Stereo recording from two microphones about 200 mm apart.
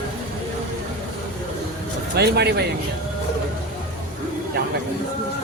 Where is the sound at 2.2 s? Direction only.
55° right (ahead or behind).